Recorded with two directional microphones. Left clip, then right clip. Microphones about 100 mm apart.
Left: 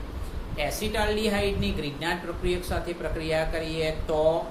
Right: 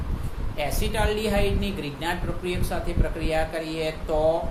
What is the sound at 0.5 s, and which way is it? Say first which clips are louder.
A woman's voice: right 1 dB; 20° right (ahead or behind).